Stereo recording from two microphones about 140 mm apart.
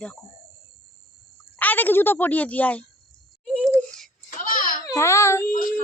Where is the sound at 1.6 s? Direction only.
15° left (ahead or behind).